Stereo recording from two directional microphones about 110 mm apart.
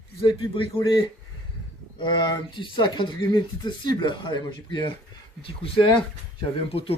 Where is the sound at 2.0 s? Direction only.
40° left (ahead or behind).